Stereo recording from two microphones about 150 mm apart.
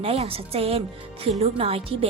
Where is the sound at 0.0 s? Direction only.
40° right (ahead or behind).